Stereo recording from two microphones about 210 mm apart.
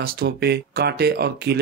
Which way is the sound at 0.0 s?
45° right (ahead or behind).